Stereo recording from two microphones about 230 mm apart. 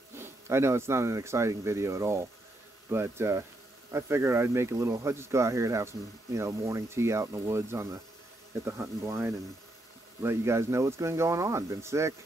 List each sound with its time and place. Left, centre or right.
0.1 s speech: centre